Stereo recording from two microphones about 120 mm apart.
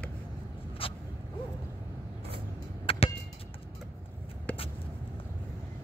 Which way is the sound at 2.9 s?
50° left (ahead or behind).